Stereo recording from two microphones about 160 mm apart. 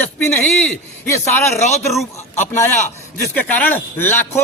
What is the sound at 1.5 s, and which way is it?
A man's voice, 45° left (ahead or behind).